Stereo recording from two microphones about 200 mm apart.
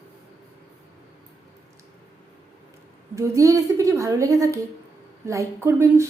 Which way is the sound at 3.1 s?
15° right (ahead or behind).